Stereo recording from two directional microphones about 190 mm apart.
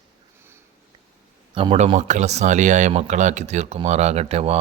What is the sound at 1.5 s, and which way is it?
Speech, 30° right (ahead or behind).